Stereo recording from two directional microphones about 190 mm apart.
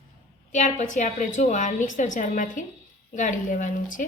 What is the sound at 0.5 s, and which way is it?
A woman's voice, 40° left (ahead or behind).